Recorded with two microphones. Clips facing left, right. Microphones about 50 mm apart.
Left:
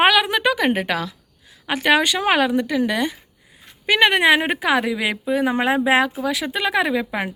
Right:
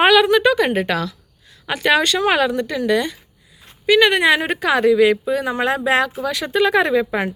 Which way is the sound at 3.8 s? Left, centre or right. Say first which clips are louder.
Right 2 dB; left.